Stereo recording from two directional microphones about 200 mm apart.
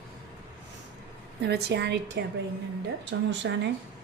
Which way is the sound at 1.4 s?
55° right (ahead or behind).